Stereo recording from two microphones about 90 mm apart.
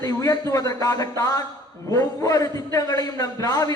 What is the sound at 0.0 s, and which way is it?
A man's voice, 40° left (ahead or behind).